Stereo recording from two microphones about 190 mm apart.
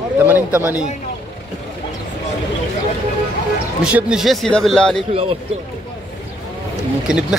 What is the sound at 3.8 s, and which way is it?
A man's voice, 5° right (ahead or behind).